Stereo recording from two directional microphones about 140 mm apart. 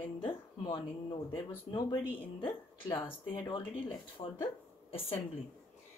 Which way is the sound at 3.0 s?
35° left (ahead or behind).